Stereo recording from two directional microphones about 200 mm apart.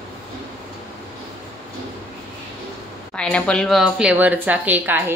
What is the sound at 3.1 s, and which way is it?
Speech, 5° left (ahead or behind).